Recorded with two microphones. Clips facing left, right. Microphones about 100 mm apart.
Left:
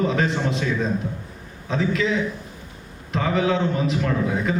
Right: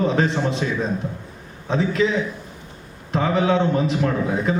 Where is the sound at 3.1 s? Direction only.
35° right (ahead or behind).